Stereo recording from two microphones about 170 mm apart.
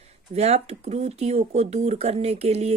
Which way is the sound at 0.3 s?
40° right (ahead or behind).